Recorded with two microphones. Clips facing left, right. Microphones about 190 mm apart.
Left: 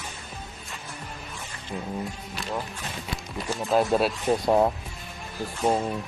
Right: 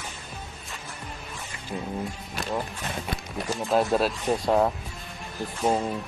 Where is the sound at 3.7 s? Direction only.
Centre (ahead or behind).